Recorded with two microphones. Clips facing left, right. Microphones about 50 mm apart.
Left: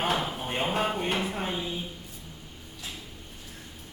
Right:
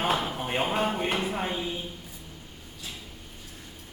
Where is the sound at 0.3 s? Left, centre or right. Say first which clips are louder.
Right 3 dB; right.